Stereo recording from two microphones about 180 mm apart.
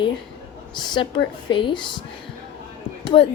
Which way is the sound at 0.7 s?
25° left (ahead or behind).